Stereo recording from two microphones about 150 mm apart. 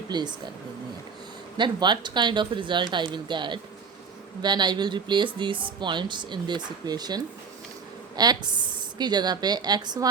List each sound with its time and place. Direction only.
0.1 s speech: 30° right (ahead or behind)
1.5 s speech: 30° right (ahead or behind)